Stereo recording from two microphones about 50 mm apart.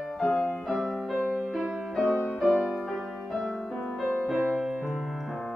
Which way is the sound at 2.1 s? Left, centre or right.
Left.